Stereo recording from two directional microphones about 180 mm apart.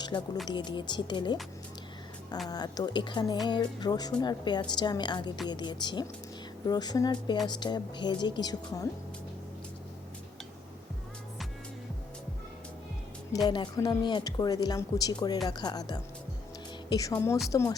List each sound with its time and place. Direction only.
0.1 s a woman's voice: 20° left (ahead or behind)
2.5 s a woman's voice: 20° left (ahead or behind)
13.5 s a woman's voice: 25° left (ahead or behind)